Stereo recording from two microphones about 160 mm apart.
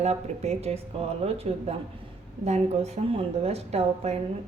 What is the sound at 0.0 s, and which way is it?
A woman's voice, 40° right (ahead or behind).